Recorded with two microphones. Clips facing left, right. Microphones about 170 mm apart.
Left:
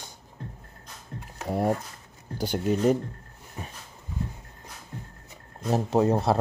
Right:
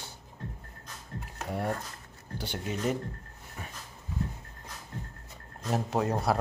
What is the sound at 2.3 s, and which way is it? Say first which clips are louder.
Speech: left 9 dB; 40° left (ahead or behind).